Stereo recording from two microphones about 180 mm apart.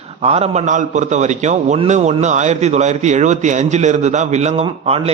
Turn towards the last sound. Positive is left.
turn(degrees=-35)  # may be behind; listen again after turning